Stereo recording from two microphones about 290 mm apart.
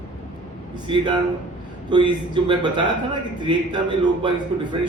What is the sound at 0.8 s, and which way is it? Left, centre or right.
A man's voice, centre.